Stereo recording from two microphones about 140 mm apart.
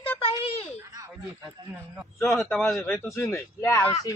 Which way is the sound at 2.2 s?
15° left (ahead or behind).